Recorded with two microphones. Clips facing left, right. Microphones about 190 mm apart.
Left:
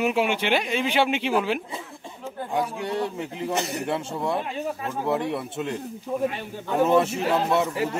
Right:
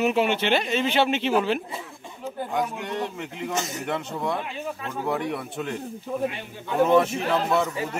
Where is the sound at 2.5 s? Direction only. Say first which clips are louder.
Left 2 dB; 30° left (ahead or behind).